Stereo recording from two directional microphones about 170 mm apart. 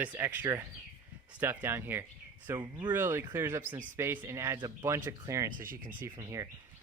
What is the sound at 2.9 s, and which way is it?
Speech, 15° right (ahead or behind).